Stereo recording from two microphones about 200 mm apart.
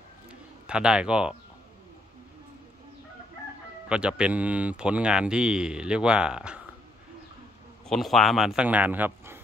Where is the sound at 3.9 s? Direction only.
5° right (ahead or behind).